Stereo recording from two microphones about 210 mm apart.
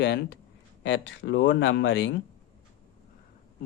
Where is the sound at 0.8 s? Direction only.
65° left (ahead or behind).